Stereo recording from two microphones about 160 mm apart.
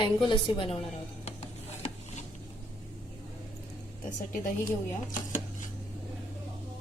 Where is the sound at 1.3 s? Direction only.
45° left (ahead or behind).